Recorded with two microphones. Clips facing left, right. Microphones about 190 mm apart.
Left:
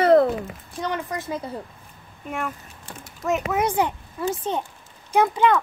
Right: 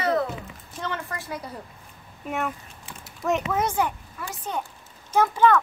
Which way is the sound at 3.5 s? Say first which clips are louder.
Left 2 dB; 15° left (ahead or behind).